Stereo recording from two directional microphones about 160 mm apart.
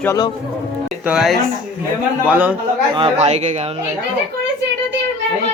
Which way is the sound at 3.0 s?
40° right (ahead or behind).